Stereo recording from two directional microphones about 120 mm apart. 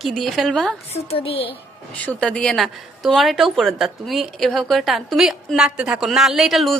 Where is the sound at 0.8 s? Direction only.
60° left (ahead or behind).